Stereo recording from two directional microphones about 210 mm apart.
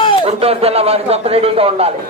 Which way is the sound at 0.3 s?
30° right (ahead or behind).